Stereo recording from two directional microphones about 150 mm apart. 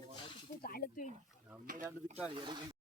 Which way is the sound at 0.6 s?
70° left (ahead or behind).